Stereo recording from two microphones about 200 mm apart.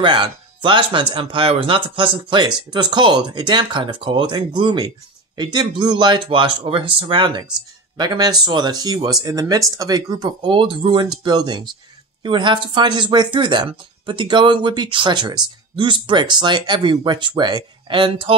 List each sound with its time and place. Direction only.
0.0 s speech: 25° right (ahead or behind)